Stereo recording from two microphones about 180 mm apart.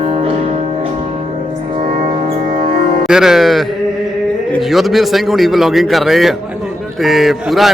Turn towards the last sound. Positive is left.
turn(degrees=0)  # may be behind; listen again after turning